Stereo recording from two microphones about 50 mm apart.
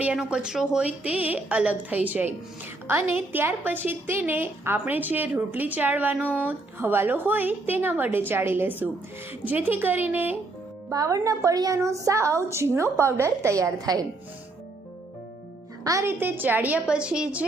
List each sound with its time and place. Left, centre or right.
0.3 s speech: centre
0.9 s a woman's voice: right
6.7 s a woman's voice: right
11.0 s a woman's voice: right
16.0 s a woman's voice: right
16.8 s a woman's voice: centre